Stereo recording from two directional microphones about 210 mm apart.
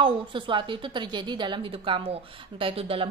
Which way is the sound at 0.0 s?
25° right (ahead or behind).